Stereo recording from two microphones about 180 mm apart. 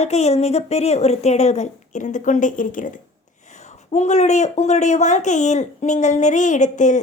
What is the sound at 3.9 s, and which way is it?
A woman's voice, 40° left (ahead or behind).